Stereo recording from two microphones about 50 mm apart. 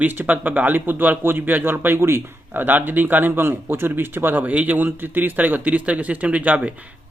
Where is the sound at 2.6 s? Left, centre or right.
Right.